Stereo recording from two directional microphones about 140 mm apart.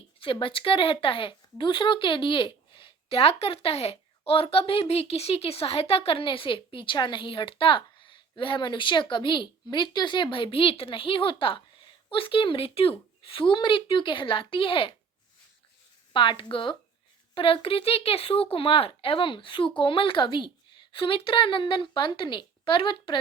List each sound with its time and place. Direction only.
0.2 s a woman's voice: 40° left (ahead or behind)
16.1 s a woman's voice: 35° left (ahead or behind)